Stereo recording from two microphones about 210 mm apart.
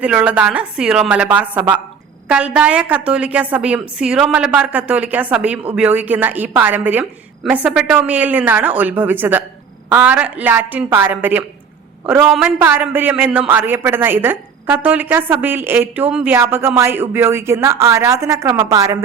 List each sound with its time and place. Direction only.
0.0 s a man's voice: 5° right (ahead or behind)